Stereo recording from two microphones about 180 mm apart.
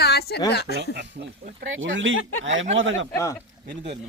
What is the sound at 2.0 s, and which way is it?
Speech, 90° right.